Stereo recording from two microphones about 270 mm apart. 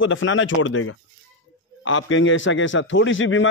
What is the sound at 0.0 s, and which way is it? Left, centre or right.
Speech, left.